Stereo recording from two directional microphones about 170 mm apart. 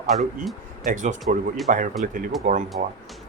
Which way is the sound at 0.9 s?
45° right (ahead or behind).